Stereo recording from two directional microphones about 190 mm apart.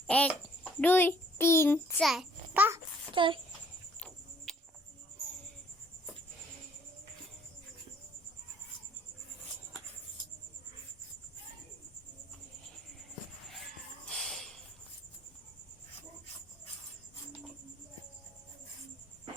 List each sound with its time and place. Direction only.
0.1 s a child's voice: 5° left (ahead or behind)
2.0 s a child's voice: centre (ahead or behind)
3.2 s a child's voice: 25° right (ahead or behind)
4.5 s cricket: centre (ahead or behind)
14.1 s music: centre (ahead or behind)